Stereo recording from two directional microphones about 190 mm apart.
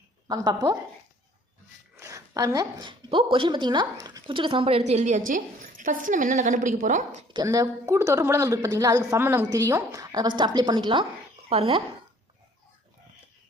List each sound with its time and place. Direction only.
0.3 s a woman's voice: 20° right (ahead or behind)
2.0 s a woman's voice: 15° right (ahead or behind); by 7.3 s 40° right (ahead or behind)
7.3 s a woman's voice: 20° right (ahead or behind)